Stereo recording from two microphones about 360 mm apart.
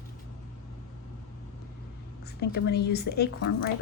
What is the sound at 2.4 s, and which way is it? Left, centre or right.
Speech, left.